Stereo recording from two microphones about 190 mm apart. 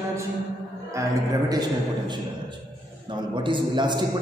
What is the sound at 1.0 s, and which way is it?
Speech, 15° right (ahead or behind).